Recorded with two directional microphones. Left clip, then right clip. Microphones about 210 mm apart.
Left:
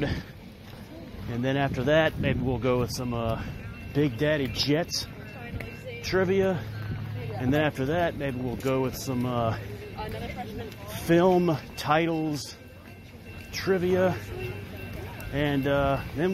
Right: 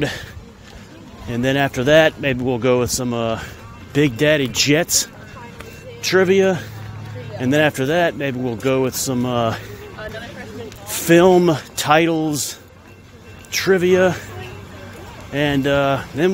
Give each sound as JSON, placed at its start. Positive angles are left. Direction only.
{"t": 1.3, "sound": "speech", "side_deg": -45}
{"t": 5.9, "sound": "speech", "side_deg": -50}
{"t": 11.1, "sound": "speech", "side_deg": -50}
{"t": 13.5, "sound": "speech", "side_deg": -50}
{"t": 15.3, "sound": "speech", "side_deg": -45}